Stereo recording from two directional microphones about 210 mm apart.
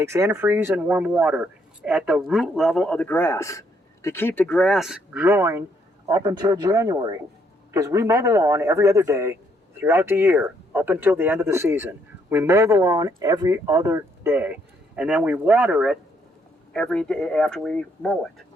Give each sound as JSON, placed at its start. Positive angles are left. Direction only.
{"t": 0.0, "sound": "speech", "side_deg": -15}